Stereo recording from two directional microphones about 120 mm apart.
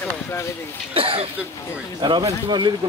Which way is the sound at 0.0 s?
15° left (ahead or behind).